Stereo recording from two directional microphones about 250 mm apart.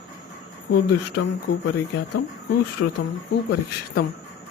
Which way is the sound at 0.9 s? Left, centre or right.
Left.